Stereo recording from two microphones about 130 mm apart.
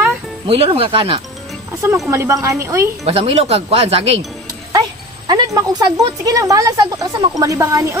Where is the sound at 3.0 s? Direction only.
50° right (ahead or behind).